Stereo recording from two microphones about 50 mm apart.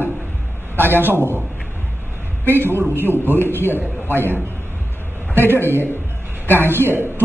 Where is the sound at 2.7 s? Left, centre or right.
Right.